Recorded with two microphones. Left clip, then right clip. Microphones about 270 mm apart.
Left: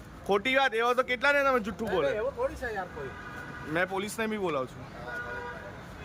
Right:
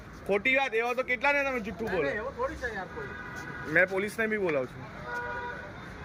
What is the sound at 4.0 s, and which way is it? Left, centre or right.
Speech, left.